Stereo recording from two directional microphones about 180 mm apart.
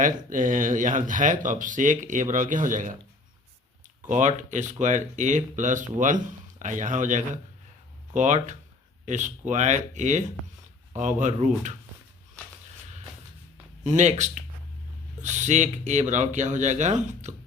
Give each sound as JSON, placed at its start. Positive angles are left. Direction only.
{"t": 0.0, "sound": "speech", "side_deg": -45}
{"t": 4.0, "sound": "speech", "side_deg": -45}
{"t": 13.8, "sound": "speech", "side_deg": -40}